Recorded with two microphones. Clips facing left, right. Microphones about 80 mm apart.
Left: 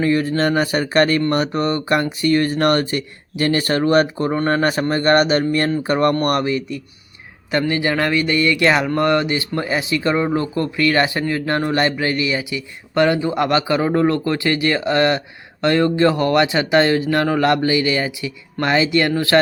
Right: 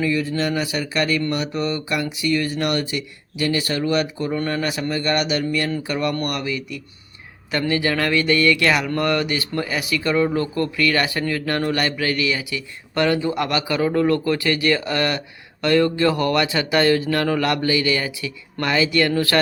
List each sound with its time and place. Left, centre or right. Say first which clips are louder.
0.0 s speech: left 4 dB; left